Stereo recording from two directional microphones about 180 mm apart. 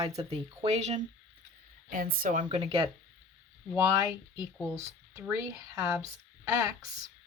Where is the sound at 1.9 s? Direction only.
50° right (ahead or behind); by 2.8 s 35° right (ahead or behind).